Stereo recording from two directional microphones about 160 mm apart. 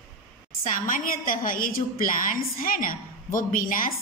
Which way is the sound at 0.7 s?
55° left (ahead or behind).